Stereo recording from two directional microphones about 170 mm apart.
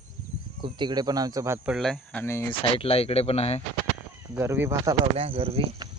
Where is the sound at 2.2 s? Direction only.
15° left (ahead or behind).